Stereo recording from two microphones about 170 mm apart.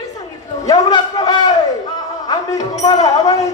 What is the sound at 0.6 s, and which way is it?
A man's voice, 25° left (ahead or behind).